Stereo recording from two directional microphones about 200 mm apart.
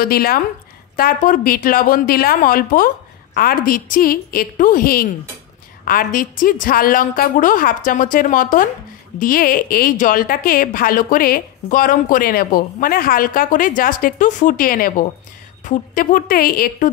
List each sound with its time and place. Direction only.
0.0 s a woman's voice: 50° left (ahead or behind)